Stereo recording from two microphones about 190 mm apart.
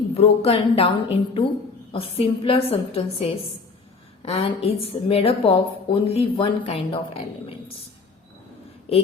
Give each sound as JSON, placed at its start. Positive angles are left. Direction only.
{"t": 0.1, "sound": "a woman's voice", "side_deg": 30}